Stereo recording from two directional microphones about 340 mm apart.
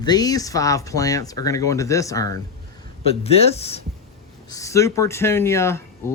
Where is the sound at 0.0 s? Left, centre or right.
Centre.